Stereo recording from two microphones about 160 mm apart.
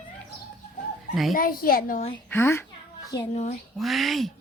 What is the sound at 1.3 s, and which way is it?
Speech, 65° left (ahead or behind).